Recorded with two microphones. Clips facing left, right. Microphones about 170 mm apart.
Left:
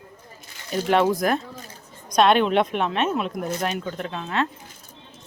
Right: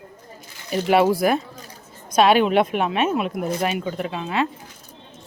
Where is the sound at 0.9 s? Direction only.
10° right (ahead or behind).